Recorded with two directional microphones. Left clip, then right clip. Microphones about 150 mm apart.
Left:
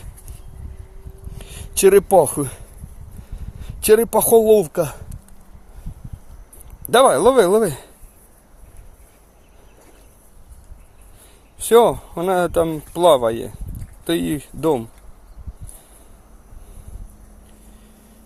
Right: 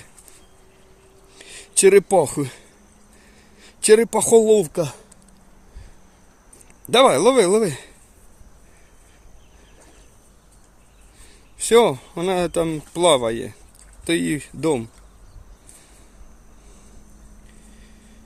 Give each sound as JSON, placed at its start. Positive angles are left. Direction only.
{"t": 1.4, "sound": "speech", "side_deg": -20}
{"t": 3.6, "sound": "speech", "side_deg": -15}
{"t": 6.9, "sound": "speech", "side_deg": -15}
{"t": 11.6, "sound": "speech", "side_deg": -20}